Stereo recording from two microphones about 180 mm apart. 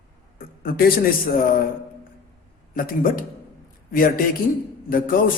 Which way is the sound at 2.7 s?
50° left (ahead or behind).